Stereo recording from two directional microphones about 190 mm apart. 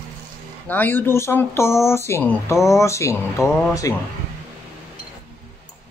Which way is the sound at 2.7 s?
15° left (ahead or behind).